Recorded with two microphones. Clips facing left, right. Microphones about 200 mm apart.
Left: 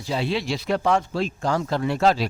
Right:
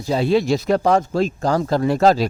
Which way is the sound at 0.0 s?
45° right (ahead or behind).